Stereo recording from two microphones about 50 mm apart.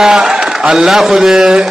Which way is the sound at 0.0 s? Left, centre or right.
Centre.